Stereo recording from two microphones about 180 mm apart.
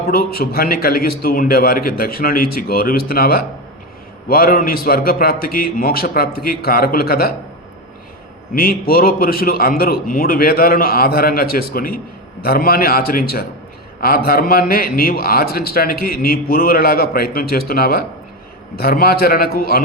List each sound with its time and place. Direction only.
0.1 s a man's voice: 55° left (ahead or behind)
8.5 s a man's voice: 55° left (ahead or behind)